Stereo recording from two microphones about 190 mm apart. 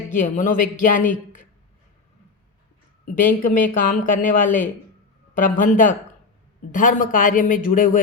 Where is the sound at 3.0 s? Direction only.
45° left (ahead or behind).